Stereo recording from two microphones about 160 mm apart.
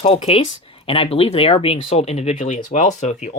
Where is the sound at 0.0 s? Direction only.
40° left (ahead or behind).